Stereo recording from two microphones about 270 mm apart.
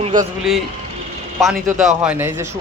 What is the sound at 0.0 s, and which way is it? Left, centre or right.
Speech, right.